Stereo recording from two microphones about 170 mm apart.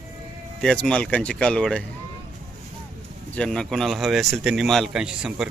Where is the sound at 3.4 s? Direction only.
5° left (ahead or behind).